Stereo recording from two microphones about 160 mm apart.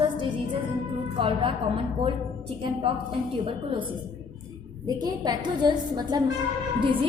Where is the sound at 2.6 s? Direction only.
35° right (ahead or behind).